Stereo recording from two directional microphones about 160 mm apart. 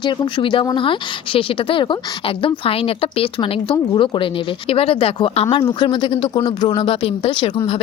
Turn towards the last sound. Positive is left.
turn(degrees=35)  # may be behind; listen again after turning